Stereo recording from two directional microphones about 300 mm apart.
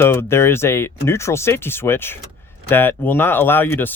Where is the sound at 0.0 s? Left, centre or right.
Centre.